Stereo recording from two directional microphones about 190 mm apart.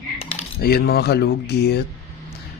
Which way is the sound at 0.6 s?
55° left (ahead or behind).